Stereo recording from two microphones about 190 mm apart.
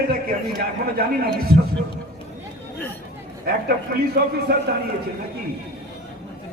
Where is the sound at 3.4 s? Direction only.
55° right (ahead or behind).